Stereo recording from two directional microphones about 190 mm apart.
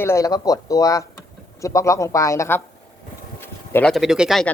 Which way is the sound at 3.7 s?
5° left (ahead or behind).